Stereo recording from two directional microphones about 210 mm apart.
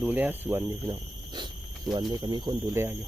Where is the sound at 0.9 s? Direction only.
20° right (ahead or behind).